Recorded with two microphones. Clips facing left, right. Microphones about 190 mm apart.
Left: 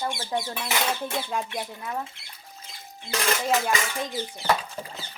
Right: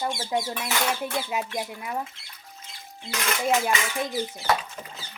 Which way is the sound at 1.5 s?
10° right (ahead or behind).